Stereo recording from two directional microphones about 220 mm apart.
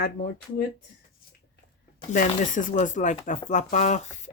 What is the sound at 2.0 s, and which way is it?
Speech, 35° left (ahead or behind).